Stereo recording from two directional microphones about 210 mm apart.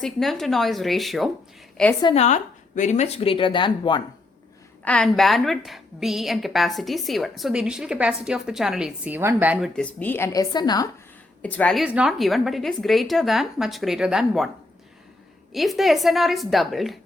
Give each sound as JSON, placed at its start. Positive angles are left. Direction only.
{"t": 0.0, "sound": "a woman's voice", "side_deg": 0}
{"t": 2.0, "sound": "a woman's voice", "side_deg": 25}
{"t": 4.9, "sound": "a woman's voice", "side_deg": 5}
{"t": 9.7, "sound": "a woman's voice", "side_deg": 5}
{"t": 11.4, "sound": "a woman's voice", "side_deg": 5}
{"t": 15.5, "sound": "a woman's voice", "side_deg": 0}